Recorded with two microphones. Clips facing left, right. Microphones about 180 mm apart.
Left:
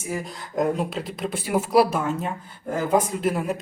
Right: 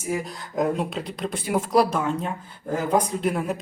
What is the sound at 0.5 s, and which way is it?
Speech, centre (ahead or behind).